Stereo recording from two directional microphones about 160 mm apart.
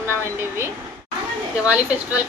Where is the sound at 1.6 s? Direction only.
10° right (ahead or behind).